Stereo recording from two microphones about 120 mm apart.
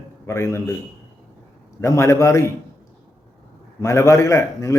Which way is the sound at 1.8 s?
25° left (ahead or behind).